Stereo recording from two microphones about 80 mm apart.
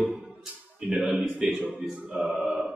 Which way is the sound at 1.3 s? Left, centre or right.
Centre.